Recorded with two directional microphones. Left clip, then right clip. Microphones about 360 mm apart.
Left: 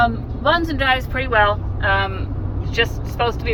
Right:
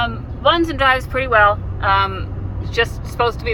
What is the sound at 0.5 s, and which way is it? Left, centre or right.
Speech, centre.